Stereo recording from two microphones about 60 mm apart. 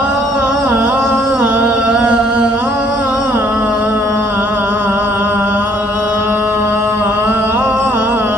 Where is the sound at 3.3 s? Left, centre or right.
Right.